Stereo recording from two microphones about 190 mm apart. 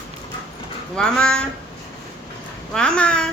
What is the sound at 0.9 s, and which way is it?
Speech, 5° left (ahead or behind).